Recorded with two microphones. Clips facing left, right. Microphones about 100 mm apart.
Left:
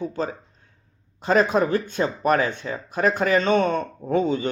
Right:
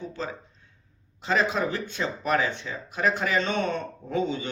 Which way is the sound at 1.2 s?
45° left (ahead or behind).